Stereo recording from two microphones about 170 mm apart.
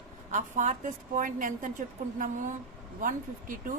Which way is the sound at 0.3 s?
45° right (ahead or behind).